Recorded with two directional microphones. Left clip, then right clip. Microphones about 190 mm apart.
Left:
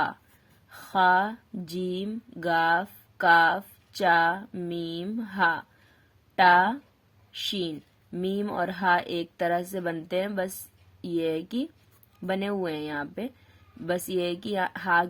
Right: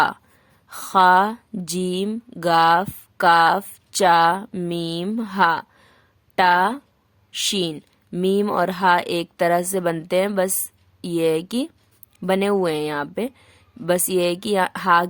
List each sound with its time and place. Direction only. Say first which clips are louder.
0.7 s a woman's voice: right 7 dB; 40° right (ahead or behind)